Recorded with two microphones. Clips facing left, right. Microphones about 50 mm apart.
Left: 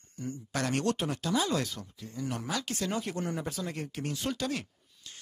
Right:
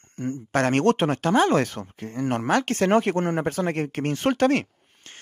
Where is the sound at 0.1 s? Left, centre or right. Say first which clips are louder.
Right 10 dB; right.